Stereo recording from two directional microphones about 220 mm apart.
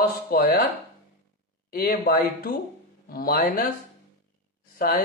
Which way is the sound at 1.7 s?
40° left (ahead or behind).